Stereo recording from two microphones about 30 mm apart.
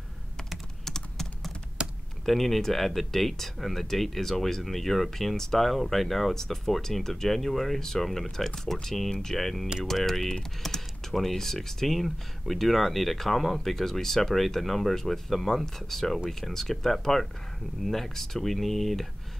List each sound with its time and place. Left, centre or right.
0.8 s computer keyboard: centre
1.8 s typing: right
2.2 s speech: centre
10.6 s typing: centre
11.1 s speech: centre